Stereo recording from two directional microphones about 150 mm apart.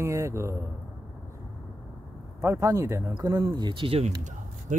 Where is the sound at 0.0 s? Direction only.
20° right (ahead or behind).